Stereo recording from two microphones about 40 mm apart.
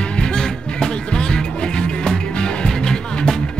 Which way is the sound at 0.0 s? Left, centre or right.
Left.